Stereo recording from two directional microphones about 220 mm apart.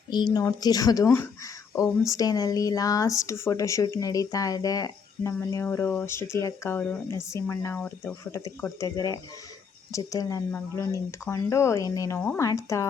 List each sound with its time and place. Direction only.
0.1 s speech: 20° left (ahead or behind)